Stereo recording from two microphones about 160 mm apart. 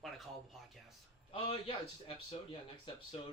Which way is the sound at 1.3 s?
35° left (ahead or behind).